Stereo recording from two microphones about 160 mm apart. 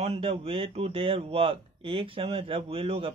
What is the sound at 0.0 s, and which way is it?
Speech, 40° right (ahead or behind).